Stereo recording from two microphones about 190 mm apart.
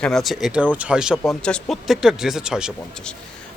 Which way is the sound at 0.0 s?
Centre (ahead or behind).